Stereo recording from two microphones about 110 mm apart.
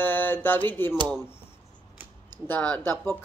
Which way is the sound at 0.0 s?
20° left (ahead or behind).